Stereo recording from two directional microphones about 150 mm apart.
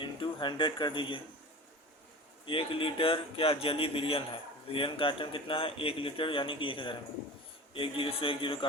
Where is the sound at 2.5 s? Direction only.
35° left (ahead or behind).